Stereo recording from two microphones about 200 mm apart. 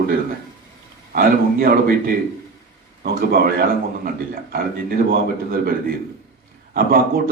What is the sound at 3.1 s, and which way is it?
A man's voice, 45° right (ahead or behind).